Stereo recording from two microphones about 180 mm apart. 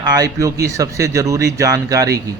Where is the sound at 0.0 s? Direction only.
20° right (ahead or behind).